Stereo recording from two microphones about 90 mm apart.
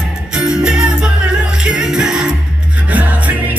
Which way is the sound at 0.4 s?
10° right (ahead or behind).